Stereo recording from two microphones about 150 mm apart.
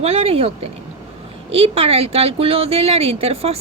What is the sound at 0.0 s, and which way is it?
A woman's voice, 45° right (ahead or behind).